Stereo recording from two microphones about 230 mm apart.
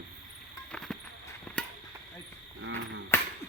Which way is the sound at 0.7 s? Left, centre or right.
Centre.